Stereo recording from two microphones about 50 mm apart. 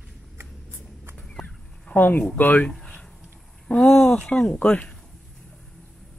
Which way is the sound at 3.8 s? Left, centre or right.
Centre.